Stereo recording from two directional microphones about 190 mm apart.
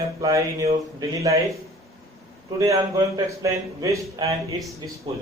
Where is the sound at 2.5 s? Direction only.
15° right (ahead or behind).